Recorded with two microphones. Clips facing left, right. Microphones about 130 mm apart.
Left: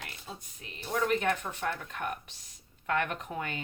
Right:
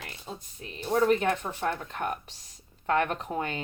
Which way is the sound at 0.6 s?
30° right (ahead or behind).